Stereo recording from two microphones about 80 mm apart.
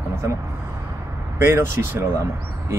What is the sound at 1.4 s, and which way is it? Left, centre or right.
Speech, right.